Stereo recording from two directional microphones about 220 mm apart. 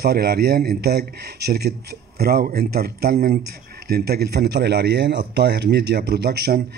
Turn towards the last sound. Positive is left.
turn(degrees=-45)  # may be behind; listen again after turning